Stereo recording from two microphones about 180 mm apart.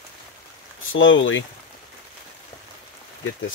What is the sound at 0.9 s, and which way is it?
Speech, 90° left.